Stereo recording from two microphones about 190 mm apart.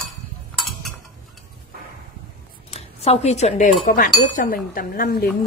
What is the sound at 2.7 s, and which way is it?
Speech, 35° left (ahead or behind).